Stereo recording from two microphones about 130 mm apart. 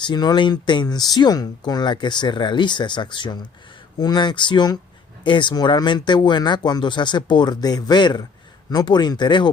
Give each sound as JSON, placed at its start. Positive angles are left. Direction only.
{"t": 0.0, "sound": "speech", "side_deg": 35}